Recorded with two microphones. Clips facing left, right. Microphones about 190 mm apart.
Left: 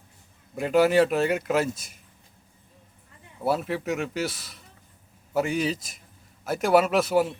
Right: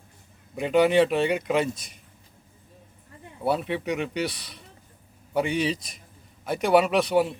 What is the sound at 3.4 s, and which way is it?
Speech, centre (ahead or behind).